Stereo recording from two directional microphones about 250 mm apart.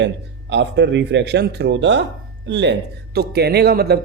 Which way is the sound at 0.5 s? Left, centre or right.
Right.